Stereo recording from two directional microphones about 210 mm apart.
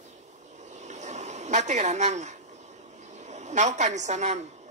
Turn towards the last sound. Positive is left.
turn(degrees=-35)  # may be behind; listen again after turning